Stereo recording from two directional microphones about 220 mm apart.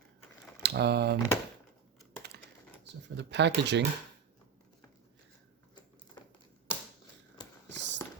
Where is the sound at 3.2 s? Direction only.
50° right (ahead or behind).